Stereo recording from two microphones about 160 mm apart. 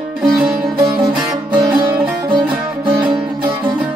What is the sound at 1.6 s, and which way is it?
Music, 30° right (ahead or behind).